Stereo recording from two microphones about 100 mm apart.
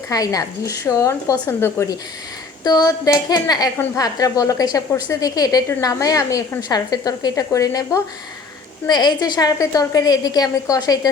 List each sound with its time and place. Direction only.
0.1 s a woman's voice: 35° left (ahead or behind)
2.6 s a woman's voice: 40° left (ahead or behind)